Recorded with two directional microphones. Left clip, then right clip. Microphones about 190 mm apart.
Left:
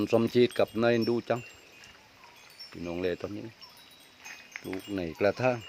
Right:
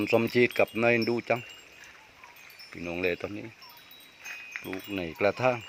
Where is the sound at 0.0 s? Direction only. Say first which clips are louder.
Right 1 dB; 15° left (ahead or behind).